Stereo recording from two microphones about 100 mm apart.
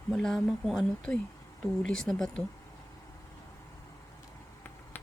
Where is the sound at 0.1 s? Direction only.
5° left (ahead or behind).